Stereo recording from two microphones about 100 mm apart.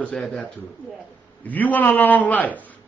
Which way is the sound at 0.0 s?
10° left (ahead or behind).